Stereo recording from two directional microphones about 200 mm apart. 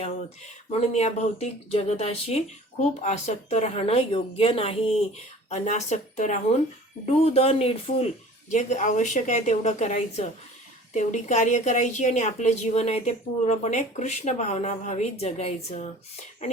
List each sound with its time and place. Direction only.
0.7 s speech: 35° left (ahead or behind)